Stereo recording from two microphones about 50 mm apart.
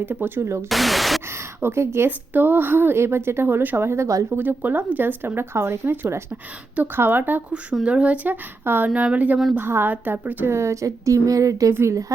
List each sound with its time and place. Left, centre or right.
0.0 s a woman's voice: right
0.7 s speech: centre
1.3 s speech: right
2.0 s a woman's voice: right
3.8 s speech: right
4.3 s speech: right
5.5 s speech: right
5.8 s a woman's voice: right
7.9 s speech: right
8.3 s a woman's voice: right
9.1 s speech: right
9.6 s a woman's voice: right
9.9 s speech: right
10.5 s speech: right